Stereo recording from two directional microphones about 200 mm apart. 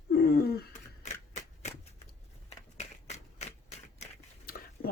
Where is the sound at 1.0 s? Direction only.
35° left (ahead or behind).